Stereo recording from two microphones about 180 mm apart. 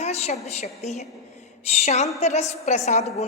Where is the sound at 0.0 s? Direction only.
35° left (ahead or behind).